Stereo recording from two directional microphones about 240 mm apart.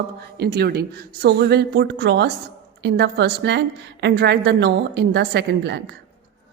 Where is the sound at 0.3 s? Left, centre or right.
Right.